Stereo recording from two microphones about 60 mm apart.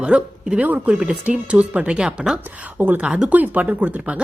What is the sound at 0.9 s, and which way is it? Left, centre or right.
Speech, centre.